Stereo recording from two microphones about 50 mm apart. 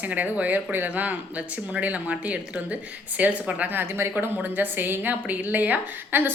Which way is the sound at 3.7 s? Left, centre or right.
Right.